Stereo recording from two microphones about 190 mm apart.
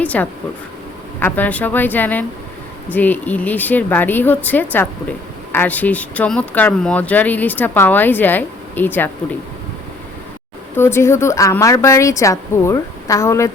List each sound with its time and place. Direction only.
0.0 s a woman's voice: 10° left (ahead or behind)
10.8 s a woman's voice: 15° left (ahead or behind)